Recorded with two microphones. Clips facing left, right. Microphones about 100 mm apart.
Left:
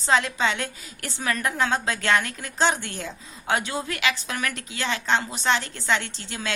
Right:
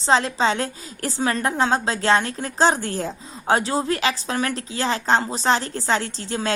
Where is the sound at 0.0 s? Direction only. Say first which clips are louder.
Right 3 dB; 30° right (ahead or behind).